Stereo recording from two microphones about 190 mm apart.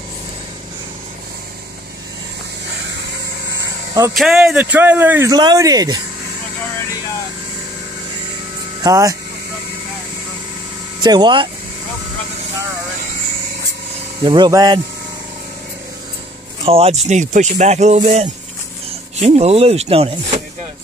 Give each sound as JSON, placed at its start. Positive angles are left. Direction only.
{"t": 4.1, "sound": "speech", "side_deg": 0}
{"t": 8.8, "sound": "speech", "side_deg": -15}
{"t": 11.0, "sound": "speech", "side_deg": -20}
{"t": 14.2, "sound": "speech", "side_deg": -25}
{"t": 16.6, "sound": "speech", "side_deg": -30}